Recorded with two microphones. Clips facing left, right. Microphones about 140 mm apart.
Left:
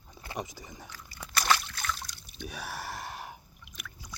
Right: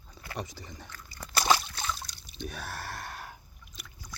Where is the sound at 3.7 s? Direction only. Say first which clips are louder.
Left 1 dB; 70° left (ahead or behind).